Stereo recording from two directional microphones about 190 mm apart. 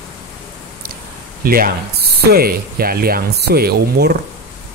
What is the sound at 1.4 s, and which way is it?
Speech, 50° right (ahead or behind).